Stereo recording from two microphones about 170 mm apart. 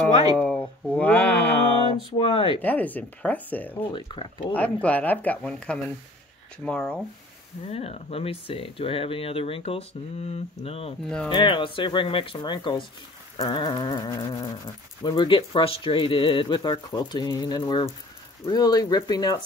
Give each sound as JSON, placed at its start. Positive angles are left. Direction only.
{"t": 0.4, "sound": "a sound", "side_deg": 10}
{"t": 2.1, "sound": "speech", "side_deg": 35}
{"t": 2.6, "sound": "speech", "side_deg": 10}
{"t": 3.9, "sound": "speech", "side_deg": 30}
{"t": 4.8, "sound": "speech", "side_deg": 10}
{"t": 7.6, "sound": "speech", "side_deg": 35}